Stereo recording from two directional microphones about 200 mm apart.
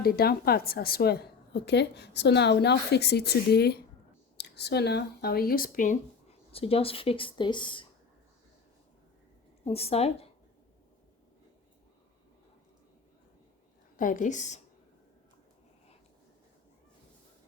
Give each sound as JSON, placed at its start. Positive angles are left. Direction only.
{"t": 0.0, "sound": "a woman's voice", "side_deg": 50}
{"t": 9.6, "sound": "a woman's voice", "side_deg": 30}
{"t": 13.9, "sound": "a woman's voice", "side_deg": 40}